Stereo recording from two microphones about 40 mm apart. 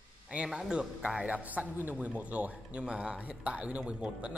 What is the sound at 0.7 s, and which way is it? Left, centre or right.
A man's voice, right.